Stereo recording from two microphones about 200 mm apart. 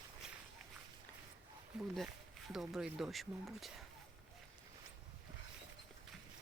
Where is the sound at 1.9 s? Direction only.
Centre (ahead or behind).